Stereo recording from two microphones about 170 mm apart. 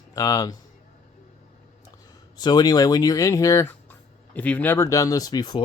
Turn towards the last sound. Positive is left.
turn(degrees=25)  # may be behind; listen again after turning